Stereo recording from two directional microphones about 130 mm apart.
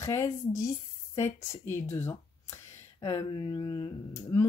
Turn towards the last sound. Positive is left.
turn(degrees=25)  # may be behind; listen again after turning